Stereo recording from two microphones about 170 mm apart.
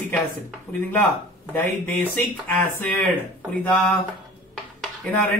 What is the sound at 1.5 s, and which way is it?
Speech, 10° left (ahead or behind).